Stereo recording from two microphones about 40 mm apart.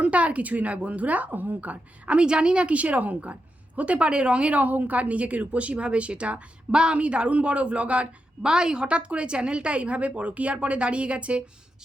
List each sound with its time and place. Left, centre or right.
0.0 s speech: right
2.2 s speech: right
8.4 s a woman's voice: centre